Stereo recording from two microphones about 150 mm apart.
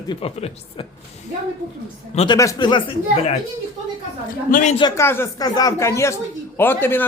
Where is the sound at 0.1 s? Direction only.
40° left (ahead or behind).